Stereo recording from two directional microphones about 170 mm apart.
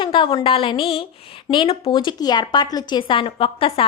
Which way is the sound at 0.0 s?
30° left (ahead or behind).